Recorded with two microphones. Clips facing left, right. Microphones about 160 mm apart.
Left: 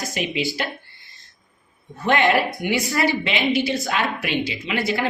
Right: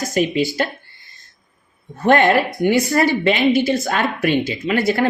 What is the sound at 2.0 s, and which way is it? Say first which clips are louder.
Speech: right 5 dB; 50° right (ahead or behind).